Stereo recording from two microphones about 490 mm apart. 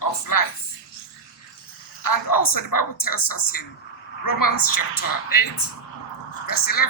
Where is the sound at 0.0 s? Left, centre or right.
Left.